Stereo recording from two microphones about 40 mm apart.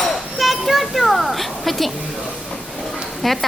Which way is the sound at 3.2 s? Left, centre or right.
Centre.